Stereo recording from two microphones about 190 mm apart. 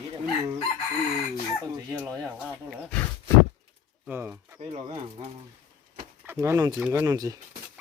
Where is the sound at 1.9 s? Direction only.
15° right (ahead or behind).